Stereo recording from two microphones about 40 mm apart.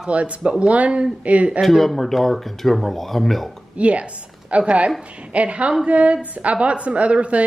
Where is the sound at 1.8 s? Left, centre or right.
Centre.